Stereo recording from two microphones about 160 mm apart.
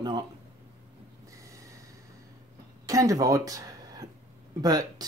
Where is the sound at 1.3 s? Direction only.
20° right (ahead or behind).